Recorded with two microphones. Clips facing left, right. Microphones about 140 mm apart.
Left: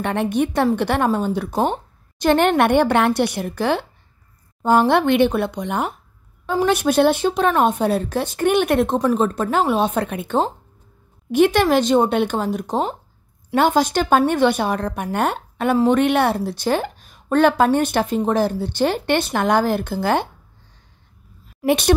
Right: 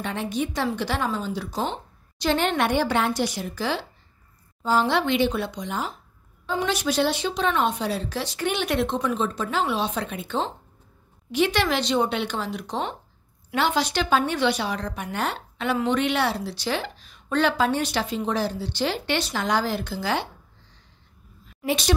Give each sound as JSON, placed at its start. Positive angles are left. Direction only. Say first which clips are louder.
{"t": 0.0, "sound": "speech", "louder": "left 7 dB", "side_deg": 60}
{"t": 21.6, "sound": "speech", "louder": "left 7 dB", "side_deg": 55}